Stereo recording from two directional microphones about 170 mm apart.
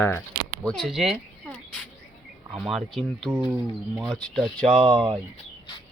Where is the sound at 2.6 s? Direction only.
Centre (ahead or behind).